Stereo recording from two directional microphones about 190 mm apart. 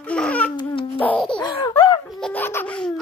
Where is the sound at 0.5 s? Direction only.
25° left (ahead or behind).